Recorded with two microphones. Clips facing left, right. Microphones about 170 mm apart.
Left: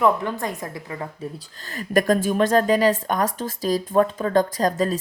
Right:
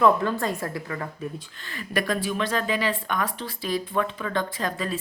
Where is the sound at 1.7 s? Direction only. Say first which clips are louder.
Left 7 dB; 45° left (ahead or behind).